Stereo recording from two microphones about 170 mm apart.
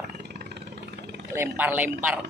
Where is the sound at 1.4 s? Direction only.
10° right (ahead or behind).